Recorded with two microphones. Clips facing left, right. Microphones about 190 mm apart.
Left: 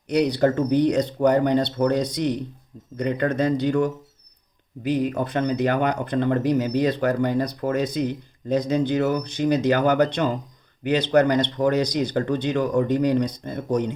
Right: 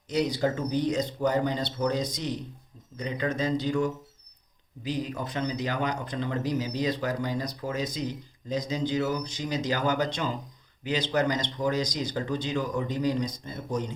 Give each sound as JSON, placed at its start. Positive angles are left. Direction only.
{"t": 0.1, "sound": "speech", "side_deg": 65}